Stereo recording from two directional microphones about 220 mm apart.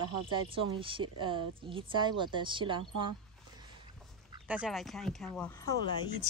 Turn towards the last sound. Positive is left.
turn(degrees=15)  # may be behind; listen again after turning